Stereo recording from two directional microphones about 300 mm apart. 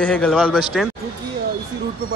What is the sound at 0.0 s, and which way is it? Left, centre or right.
Speech, centre.